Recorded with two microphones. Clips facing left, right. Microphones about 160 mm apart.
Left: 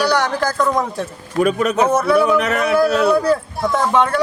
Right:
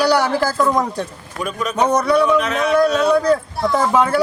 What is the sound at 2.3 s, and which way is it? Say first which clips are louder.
Speech: left 1 dB; 65° left (ahead or behind).